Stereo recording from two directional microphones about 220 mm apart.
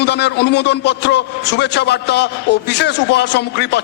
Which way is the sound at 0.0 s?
50° left (ahead or behind).